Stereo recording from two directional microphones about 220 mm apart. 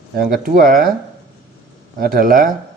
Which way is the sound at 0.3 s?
40° right (ahead or behind).